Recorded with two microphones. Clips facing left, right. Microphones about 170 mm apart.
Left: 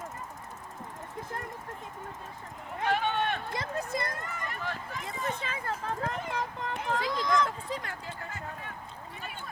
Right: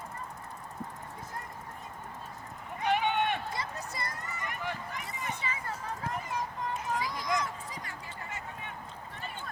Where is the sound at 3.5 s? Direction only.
50° left (ahead or behind).